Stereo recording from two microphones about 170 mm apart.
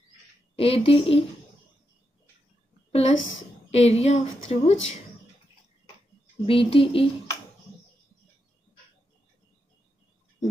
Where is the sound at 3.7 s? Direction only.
40° left (ahead or behind).